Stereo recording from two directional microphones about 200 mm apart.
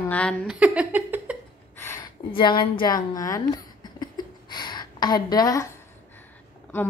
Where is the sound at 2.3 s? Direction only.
25° left (ahead or behind).